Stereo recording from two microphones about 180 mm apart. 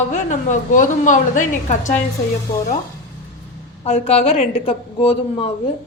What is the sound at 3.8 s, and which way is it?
A woman's voice, 35° left (ahead or behind).